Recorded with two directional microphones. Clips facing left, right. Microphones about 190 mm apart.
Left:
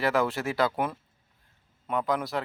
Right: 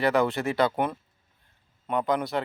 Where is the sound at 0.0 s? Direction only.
Centre (ahead or behind).